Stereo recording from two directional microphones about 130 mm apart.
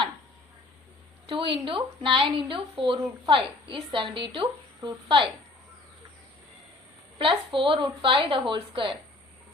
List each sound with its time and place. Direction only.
1.3 s speech: 40° right (ahead or behind)
7.2 s speech: 40° right (ahead or behind)